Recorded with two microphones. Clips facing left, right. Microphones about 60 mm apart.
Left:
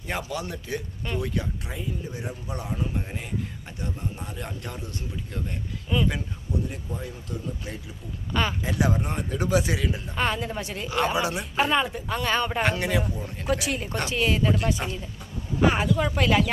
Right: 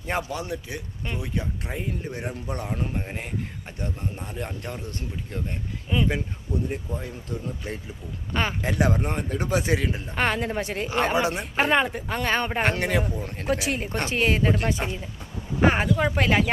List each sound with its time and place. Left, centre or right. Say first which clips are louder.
0.1 s speech: right 2 dB; right
0.4 s a man's voice: even; centre
1.6 s speech: right 2 dB; right
4.4 s speech: right 2 dB; right
5.9 s a man's voice: even; centre
7.0 s speech: right 1 dB; right
14.8 s speech: right 1 dB; right
15.6 s speech: right 1 dB; right